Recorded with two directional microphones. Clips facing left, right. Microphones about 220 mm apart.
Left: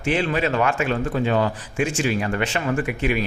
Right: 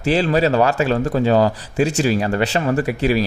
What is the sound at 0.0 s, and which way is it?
Speech, 35° right (ahead or behind).